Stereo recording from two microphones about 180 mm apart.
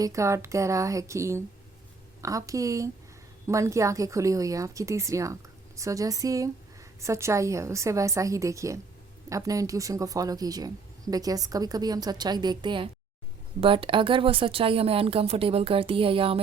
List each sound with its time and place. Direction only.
0.0 s a woman's voice: 15° right (ahead or behind)